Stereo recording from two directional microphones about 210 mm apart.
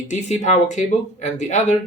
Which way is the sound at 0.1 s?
35° left (ahead or behind).